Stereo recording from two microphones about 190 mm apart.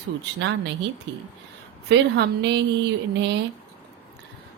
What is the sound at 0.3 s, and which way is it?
Speech, 70° right (ahead or behind).